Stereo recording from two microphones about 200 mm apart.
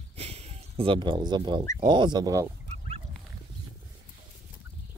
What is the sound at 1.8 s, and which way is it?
Speech, 20° right (ahead or behind).